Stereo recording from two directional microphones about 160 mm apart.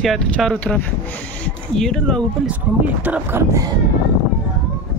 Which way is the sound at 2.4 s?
10° right (ahead or behind).